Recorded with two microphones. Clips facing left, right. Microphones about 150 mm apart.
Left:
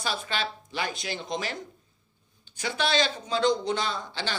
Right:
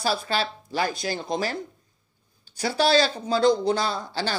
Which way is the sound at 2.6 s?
35° right (ahead or behind).